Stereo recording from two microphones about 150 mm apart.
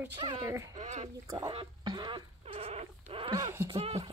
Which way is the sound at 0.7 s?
50° right (ahead or behind).